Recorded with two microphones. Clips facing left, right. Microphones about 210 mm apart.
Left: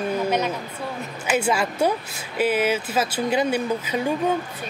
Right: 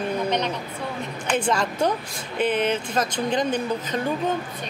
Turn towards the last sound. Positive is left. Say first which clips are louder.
# left 1 dB
turn(degrees=10)  # may be behind; listen again after turning